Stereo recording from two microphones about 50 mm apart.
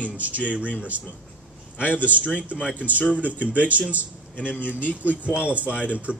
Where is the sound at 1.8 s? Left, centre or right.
Left.